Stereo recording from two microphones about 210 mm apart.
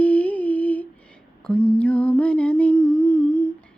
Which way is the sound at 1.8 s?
5° left (ahead or behind).